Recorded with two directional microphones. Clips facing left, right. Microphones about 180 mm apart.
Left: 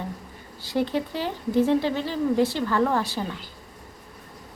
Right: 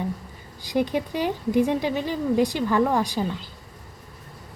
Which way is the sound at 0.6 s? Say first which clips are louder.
Right 1 dB; 15° right (ahead or behind).